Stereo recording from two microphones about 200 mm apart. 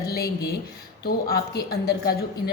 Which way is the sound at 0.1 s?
50° left (ahead or behind).